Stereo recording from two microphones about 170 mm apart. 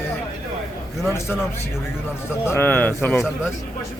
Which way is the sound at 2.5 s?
10° left (ahead or behind).